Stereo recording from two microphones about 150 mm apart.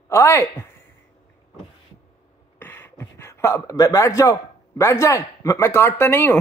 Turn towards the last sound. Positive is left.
turn(degrees=15)  # may be behind; listen again after turning